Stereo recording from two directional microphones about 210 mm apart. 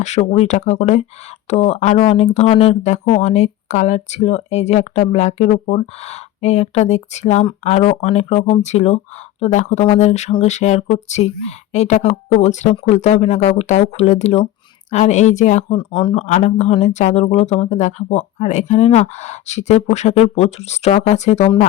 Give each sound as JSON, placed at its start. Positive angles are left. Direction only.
{"t": 0.0, "sound": "speech", "side_deg": 35}